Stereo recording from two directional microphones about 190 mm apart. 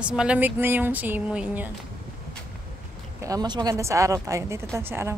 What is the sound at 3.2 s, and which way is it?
A woman's voice, 20° right (ahead or behind).